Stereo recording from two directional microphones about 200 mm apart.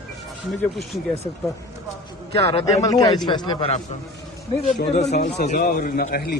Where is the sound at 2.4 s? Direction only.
30° left (ahead or behind).